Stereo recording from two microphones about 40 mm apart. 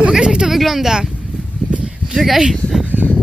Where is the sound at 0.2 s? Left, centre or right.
Centre.